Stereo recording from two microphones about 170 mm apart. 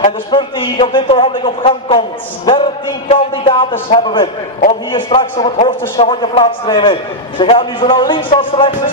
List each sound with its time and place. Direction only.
0.3 s a man's voice: 30° left (ahead or behind)